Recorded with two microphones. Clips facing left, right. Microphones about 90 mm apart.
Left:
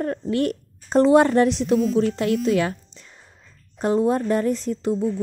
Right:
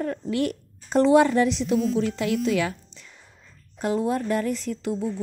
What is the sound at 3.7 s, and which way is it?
Speech, 35° left (ahead or behind).